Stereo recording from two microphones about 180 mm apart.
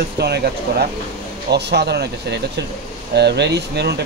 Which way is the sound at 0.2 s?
65° right (ahead or behind).